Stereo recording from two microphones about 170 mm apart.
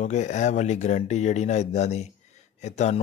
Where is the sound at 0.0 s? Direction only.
45° left (ahead or behind).